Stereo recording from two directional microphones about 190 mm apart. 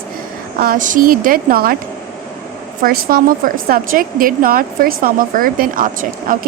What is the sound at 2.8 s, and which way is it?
A woman's voice, 55° right (ahead or behind).